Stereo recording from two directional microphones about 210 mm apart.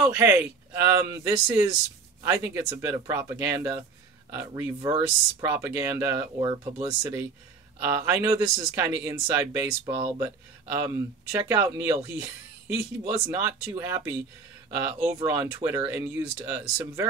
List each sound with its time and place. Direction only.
0.0 s speech: 10° right (ahead or behind)
13.3 s speech: 10° right (ahead or behind)